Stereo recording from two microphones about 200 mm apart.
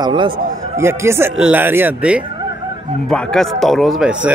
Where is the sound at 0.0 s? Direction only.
25° right (ahead or behind).